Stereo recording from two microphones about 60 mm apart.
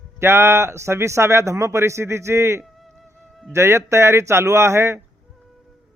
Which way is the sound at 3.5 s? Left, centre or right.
Right.